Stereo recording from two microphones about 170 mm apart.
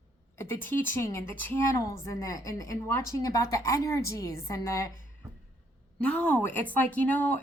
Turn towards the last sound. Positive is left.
turn(degrees=10)  # may be behind; listen again after turning